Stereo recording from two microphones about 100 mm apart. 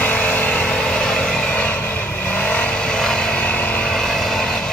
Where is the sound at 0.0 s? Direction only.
15° left (ahead or behind).